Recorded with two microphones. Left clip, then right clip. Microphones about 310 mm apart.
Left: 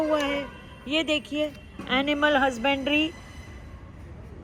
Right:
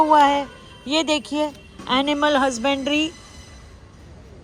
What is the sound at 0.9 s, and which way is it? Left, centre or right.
Speech, centre.